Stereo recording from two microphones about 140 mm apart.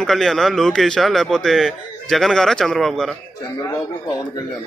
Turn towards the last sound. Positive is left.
turn(degrees=25)  # may be behind; listen again after turning